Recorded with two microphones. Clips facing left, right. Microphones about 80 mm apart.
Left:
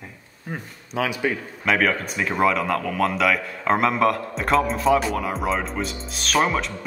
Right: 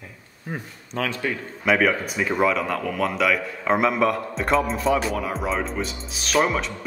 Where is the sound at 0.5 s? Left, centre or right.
Centre.